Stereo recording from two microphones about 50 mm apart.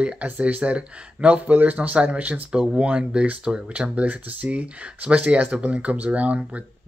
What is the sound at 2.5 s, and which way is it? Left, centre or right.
Speech, centre.